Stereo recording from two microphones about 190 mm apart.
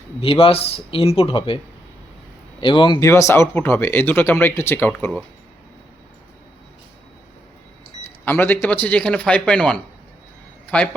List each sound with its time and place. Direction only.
0.2 s speech: 30° left (ahead or behind)
2.6 s speech: 25° left (ahead or behind)
3.1 s speech: 15° left (ahead or behind)
8.2 s speech: 10° left (ahead or behind)